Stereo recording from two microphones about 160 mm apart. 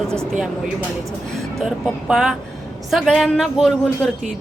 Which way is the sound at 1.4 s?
Centre (ahead or behind).